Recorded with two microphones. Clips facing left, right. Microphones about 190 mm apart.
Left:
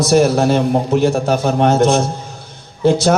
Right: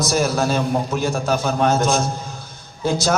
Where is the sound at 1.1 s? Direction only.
30° left (ahead or behind).